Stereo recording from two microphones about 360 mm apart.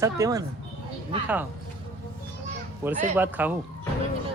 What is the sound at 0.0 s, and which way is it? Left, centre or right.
Speech, centre.